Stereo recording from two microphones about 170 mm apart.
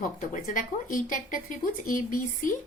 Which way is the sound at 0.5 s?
50° left (ahead or behind).